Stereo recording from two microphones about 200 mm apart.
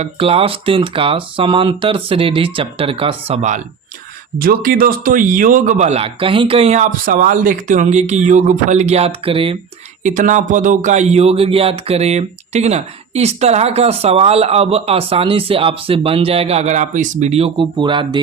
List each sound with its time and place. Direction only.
0.0 s speech: 30° right (ahead or behind)
4.4 s speech: 45° right (ahead or behind)
7.0 s speech: 45° right (ahead or behind); by 9.6 s 25° right (ahead or behind)
10.0 s speech: 40° right (ahead or behind); by 18.2 s 25° right (ahead or behind)